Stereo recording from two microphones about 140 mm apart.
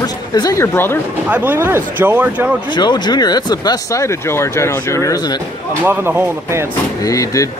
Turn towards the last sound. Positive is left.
turn(degrees=25)  # may be behind; listen again after turning